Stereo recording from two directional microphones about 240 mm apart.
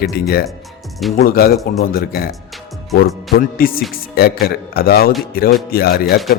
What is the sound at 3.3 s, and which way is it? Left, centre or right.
A man's voice, left.